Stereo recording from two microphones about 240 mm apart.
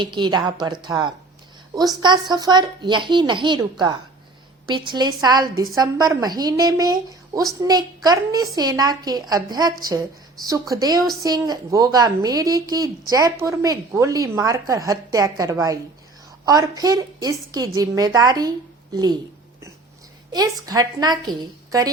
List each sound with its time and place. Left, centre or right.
0.0 s a woman's voice: centre
20.3 s a woman's voice: centre